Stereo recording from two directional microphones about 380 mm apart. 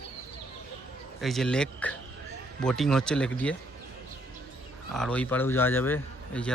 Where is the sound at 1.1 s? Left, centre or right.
Centre.